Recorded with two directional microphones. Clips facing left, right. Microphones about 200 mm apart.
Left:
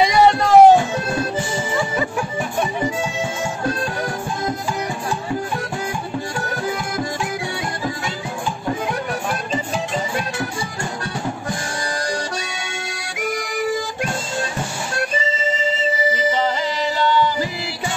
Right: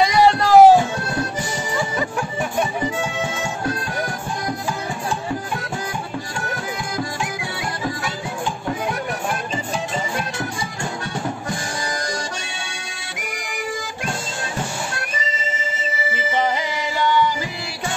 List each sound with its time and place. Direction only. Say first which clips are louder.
0.0 s music: left 1 dB; centre (ahead or behind)
17.0 s music: even; 15° right (ahead or behind)